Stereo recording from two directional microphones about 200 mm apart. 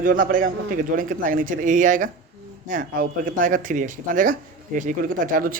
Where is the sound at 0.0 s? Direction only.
45° right (ahead or behind).